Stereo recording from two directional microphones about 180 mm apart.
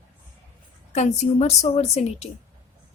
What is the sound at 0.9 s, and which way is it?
A woman's voice, 40° left (ahead or behind).